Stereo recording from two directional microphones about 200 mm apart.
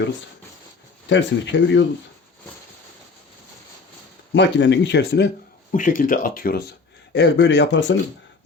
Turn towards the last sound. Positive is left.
turn(degrees=60)  # may be behind; listen again after turning